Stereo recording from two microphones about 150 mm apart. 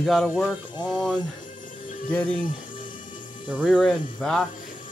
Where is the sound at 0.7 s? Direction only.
30° left (ahead or behind).